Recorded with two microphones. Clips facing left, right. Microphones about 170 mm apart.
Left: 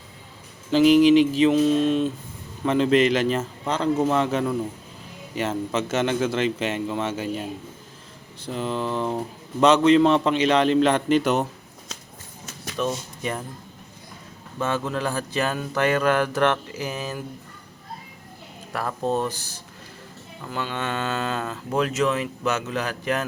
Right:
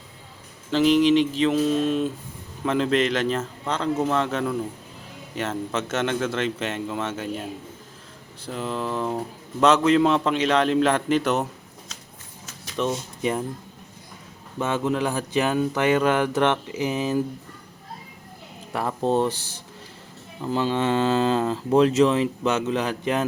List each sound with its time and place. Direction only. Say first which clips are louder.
0.7 s mantra: left 3 dB; 5° left (ahead or behind)
1.5 s a man's voice: left 2 dB; centre (ahead or behind)
8.4 s a man's voice: left 1 dB; centre (ahead or behind)
12.7 s speech: right 1 dB; 20° right (ahead or behind)
14.6 s speech: right 2 dB; 20° right (ahead or behind)
18.7 s speech: right 2 dB; 20° right (ahead or behind)